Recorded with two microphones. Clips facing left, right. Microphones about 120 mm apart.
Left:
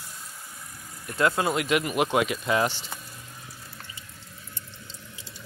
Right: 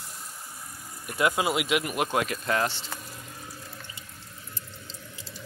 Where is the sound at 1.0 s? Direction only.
15° right (ahead or behind); by 2.8 s 5° left (ahead or behind).